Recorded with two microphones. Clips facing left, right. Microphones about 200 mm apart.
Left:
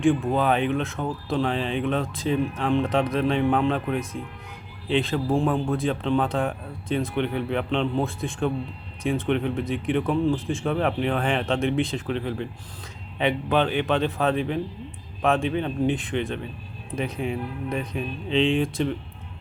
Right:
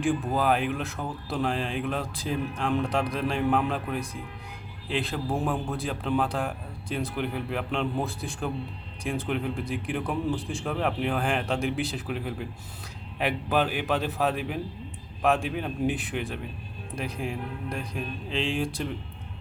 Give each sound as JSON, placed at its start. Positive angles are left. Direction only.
{"t": 0.0, "sound": "speech", "side_deg": 0}